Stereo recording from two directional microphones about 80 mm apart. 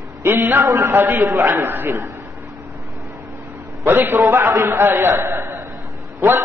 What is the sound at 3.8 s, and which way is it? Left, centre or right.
A man's voice, right.